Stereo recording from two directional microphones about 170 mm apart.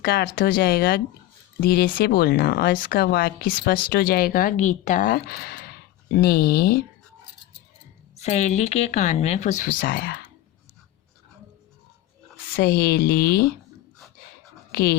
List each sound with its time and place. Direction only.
0.0 s speech: 65° left (ahead or behind)
8.1 s speech: 40° left (ahead or behind); by 10.2 s 65° left (ahead or behind)
12.5 s speech: 65° left (ahead or behind)
14.7 s speech: 70° left (ahead or behind)